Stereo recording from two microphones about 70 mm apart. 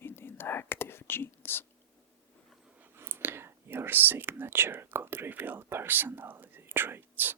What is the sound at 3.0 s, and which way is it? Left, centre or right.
Speech, right.